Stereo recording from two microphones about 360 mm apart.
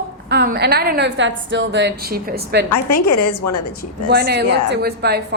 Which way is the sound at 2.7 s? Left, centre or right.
Left.